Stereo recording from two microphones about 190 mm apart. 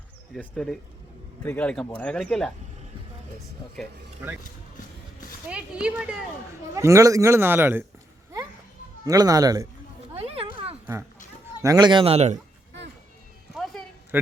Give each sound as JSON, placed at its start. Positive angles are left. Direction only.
{"t": 0.3, "sound": "speech", "side_deg": 5}
{"t": 5.5, "sound": "speech", "side_deg": -5}
{"t": 6.7, "sound": "a man's voice", "side_deg": -15}
{"t": 9.0, "sound": "speech", "side_deg": -20}
{"t": 10.2, "sound": "a sound", "side_deg": -30}
{"t": 11.6, "sound": "speech", "side_deg": -20}